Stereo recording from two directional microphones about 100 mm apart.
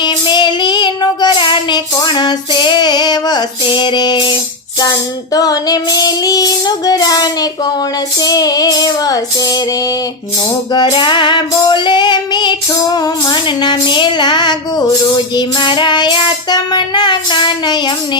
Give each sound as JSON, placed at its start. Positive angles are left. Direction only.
{"t": 0.0, "sound": "child singing", "side_deg": 50}
{"t": 4.8, "sound": "child singing", "side_deg": 40}
{"t": 8.2, "sound": "child singing", "side_deg": 40}
{"t": 10.7, "sound": "music", "side_deg": 45}